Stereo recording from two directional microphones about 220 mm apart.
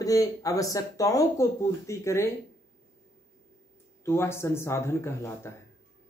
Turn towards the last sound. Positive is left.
turn(degrees=10)  # may be behind; listen again after turning